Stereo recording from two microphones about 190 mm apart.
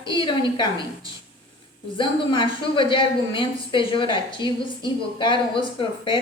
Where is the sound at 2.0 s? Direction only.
25° left (ahead or behind).